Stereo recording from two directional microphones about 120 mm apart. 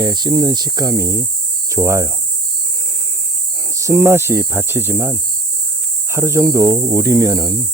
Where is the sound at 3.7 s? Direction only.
25° right (ahead or behind).